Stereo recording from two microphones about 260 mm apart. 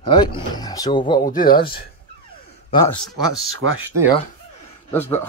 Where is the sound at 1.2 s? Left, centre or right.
Left.